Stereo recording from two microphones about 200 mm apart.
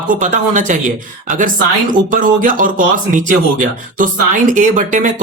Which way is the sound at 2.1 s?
45° right (ahead or behind).